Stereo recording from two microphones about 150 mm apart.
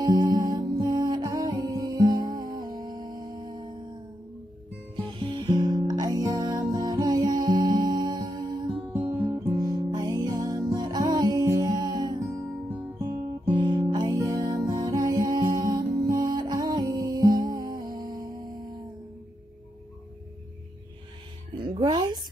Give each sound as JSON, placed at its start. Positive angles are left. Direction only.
{"t": 0.0, "sound": "music", "side_deg": -25}
{"t": 5.0, "sound": "music", "side_deg": -30}
{"t": 8.7, "sound": "music", "side_deg": -15}
{"t": 9.6, "sound": "music", "side_deg": -30}
{"t": 12.6, "sound": "music", "side_deg": -10}
{"t": 13.5, "sound": "music", "side_deg": -30}
{"t": 21.5, "sound": "music", "side_deg": -30}